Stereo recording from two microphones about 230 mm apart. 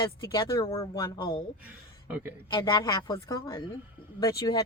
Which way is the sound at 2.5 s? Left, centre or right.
Centre.